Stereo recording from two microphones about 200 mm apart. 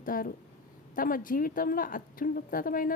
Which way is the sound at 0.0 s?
45° left (ahead or behind).